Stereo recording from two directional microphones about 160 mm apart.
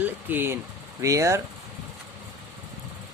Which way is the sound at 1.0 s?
20° right (ahead or behind).